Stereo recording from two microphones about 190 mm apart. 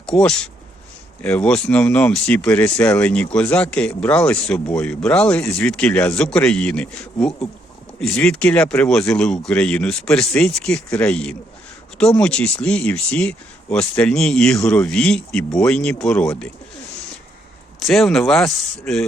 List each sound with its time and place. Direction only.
0.0 s speech: 5° left (ahead or behind)
17.7 s speech: centre (ahead or behind)